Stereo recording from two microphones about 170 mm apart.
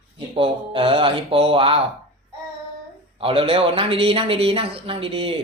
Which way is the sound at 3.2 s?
35° right (ahead or behind).